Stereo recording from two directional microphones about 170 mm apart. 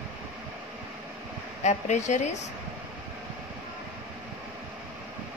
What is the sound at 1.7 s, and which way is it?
Speech, 45° left (ahead or behind).